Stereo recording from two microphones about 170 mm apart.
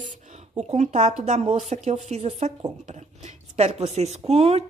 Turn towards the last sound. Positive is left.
turn(degrees=-35)  # may be behind; listen again after turning